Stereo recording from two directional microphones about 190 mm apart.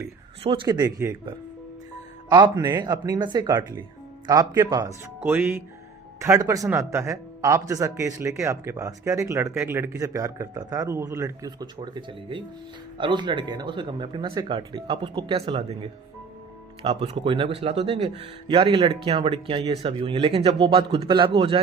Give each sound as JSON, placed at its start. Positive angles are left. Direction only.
{"t": 0.4, "sound": "speech", "side_deg": -25}
{"t": 2.3, "sound": "speech", "side_deg": -20}